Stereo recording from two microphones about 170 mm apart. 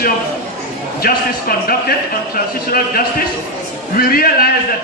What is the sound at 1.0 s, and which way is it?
A man's voice, 60° left (ahead or behind).